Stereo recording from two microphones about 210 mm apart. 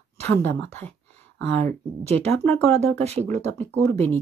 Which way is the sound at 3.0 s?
30° right (ahead or behind).